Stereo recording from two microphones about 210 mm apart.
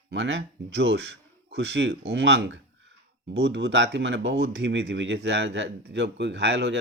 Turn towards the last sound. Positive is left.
turn(degrees=-55)  # may be behind; listen again after turning